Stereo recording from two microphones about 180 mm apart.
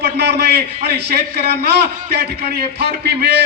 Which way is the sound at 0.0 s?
65° right (ahead or behind).